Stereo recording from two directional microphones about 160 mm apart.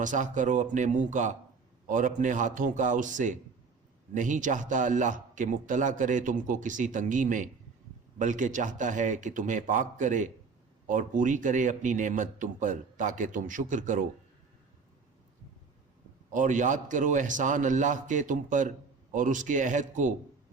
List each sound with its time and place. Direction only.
0.0 s a man's voice: 50° right (ahead or behind)
16.3 s a man's voice: 50° right (ahead or behind)